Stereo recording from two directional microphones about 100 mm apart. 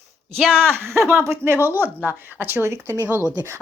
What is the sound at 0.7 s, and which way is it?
Speech, 25° right (ahead or behind).